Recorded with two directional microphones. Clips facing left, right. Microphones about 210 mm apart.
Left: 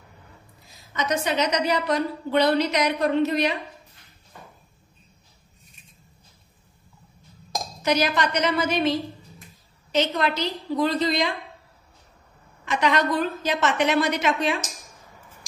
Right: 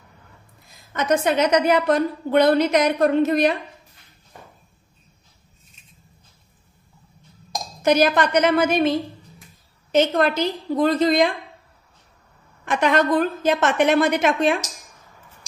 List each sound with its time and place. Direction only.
0.9 s a woman's voice: 55° right (ahead or behind)
7.8 s a woman's voice: 50° right (ahead or behind)
9.9 s a woman's voice: 50° right (ahead or behind)
12.6 s a woman's voice: 50° right (ahead or behind)